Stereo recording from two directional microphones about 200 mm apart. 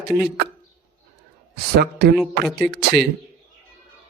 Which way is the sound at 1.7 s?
55° right (ahead or behind).